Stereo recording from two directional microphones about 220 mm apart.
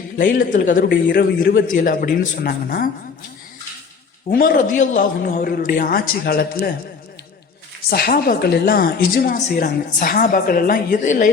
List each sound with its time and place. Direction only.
0.2 s speech: 40° left (ahead or behind)
1.0 s speech: 45° left (ahead or behind)
4.3 s speech: 40° left (ahead or behind)
7.9 s speech: 45° left (ahead or behind)